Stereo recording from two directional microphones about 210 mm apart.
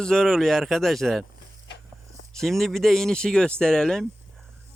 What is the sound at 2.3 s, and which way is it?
Speech, centre (ahead or behind).